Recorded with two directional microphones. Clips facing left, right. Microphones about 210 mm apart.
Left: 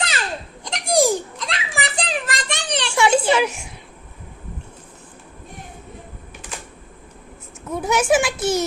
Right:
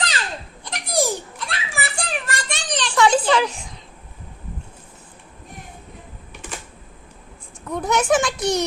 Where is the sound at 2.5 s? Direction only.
65° left (ahead or behind).